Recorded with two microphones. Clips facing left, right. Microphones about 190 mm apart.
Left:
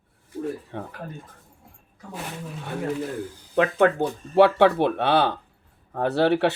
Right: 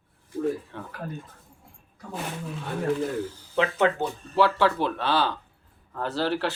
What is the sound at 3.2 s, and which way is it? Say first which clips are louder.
Speech: right 2 dB; 15° left (ahead or behind).